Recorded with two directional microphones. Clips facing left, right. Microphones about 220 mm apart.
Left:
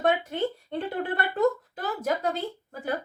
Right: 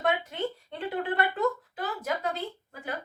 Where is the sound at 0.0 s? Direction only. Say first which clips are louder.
Left 4 dB; 45° left (ahead or behind).